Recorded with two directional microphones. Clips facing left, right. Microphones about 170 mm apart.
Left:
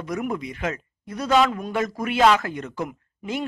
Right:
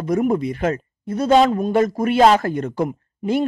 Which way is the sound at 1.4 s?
40° right (ahead or behind).